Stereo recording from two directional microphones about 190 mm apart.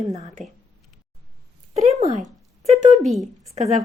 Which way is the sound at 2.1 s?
40° right (ahead or behind).